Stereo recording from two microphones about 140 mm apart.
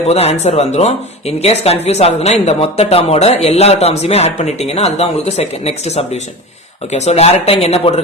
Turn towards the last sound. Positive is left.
turn(degrees=45)  # may be behind; listen again after turning